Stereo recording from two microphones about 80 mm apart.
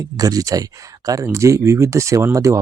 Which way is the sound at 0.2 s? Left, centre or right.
Right.